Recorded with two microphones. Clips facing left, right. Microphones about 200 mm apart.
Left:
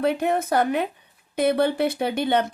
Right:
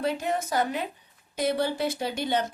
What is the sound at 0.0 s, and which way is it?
Speech, 60° left (ahead or behind).